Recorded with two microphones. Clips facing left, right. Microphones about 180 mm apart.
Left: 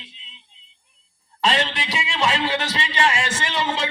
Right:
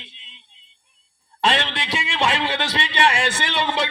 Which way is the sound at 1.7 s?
65° right (ahead or behind).